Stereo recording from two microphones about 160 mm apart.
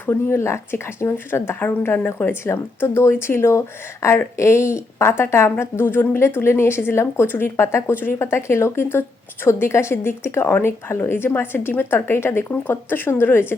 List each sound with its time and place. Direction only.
0.0 s a woman's voice: 15° left (ahead or behind)